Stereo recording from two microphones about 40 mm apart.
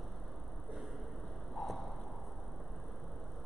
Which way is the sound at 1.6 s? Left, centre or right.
Centre.